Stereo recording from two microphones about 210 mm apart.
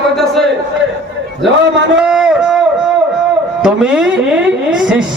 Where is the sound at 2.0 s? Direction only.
5° right (ahead or behind).